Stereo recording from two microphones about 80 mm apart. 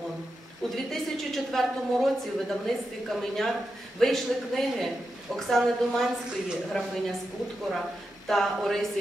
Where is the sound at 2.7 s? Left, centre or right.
Centre.